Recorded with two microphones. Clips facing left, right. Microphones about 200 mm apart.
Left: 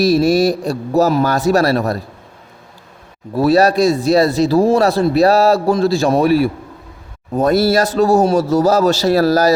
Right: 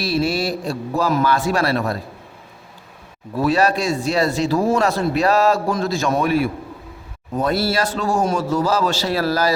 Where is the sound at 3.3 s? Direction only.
40° left (ahead or behind).